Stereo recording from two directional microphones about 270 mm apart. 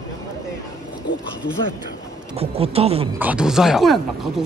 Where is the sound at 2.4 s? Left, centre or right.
Right.